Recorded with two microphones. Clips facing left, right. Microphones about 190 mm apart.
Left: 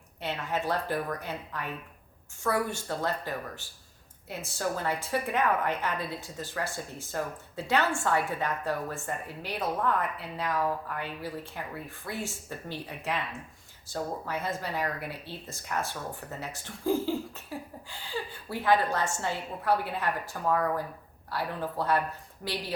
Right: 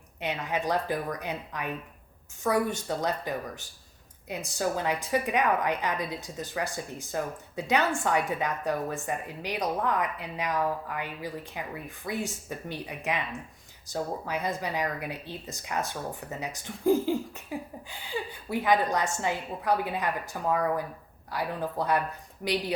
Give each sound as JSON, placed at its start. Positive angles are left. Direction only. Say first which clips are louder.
{"t": 0.2, "sound": "a woman's voice", "louder": "right 1 dB", "side_deg": -15}